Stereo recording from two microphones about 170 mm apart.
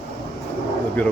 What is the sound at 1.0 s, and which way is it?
Speech, 10° left (ahead or behind).